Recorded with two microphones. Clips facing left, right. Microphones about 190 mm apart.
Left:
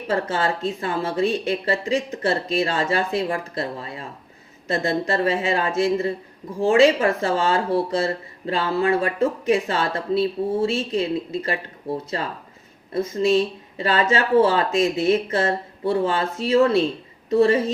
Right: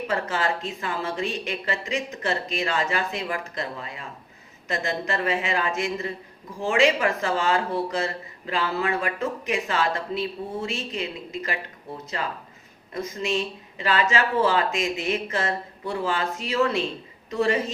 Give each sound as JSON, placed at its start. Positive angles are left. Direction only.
{"t": 0.1, "sound": "speech", "side_deg": 30}